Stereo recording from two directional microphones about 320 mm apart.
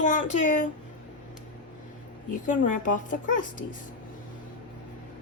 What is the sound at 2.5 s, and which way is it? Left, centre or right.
A woman's voice, left.